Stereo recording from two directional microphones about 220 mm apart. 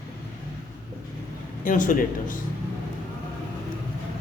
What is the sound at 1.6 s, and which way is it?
Speech, 35° left (ahead or behind).